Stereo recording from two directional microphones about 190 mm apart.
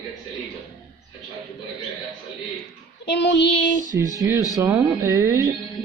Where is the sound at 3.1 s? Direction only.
65° left (ahead or behind).